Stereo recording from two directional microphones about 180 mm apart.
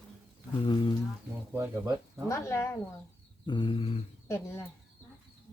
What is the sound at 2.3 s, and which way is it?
Speech, 15° left (ahead or behind).